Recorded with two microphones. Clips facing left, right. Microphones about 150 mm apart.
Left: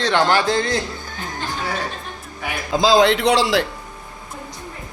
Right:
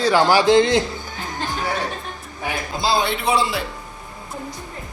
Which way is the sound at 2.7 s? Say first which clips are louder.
Left 8 dB; 90° left.